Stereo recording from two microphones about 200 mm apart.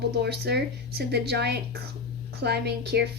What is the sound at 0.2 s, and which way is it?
Speech, 55° right (ahead or behind).